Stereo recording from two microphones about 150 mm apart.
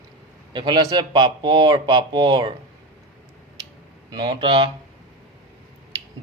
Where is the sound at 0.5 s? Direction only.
30° right (ahead or behind).